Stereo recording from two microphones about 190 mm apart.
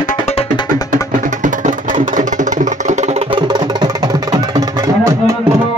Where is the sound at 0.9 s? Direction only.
45° right (ahead or behind); by 5.2 s 15° right (ahead or behind).